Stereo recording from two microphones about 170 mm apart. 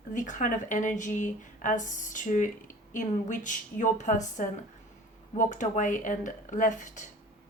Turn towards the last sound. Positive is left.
turn(degrees=45)  # may be behind; listen again after turning